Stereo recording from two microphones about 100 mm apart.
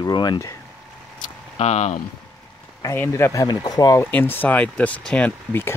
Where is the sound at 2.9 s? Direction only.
25° left (ahead or behind).